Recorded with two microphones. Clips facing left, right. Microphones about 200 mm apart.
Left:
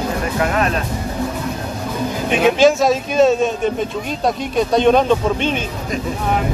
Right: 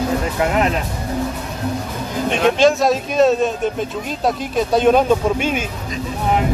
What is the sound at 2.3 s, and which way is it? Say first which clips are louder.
Speech: left 2 dB; 5° left (ahead or behind).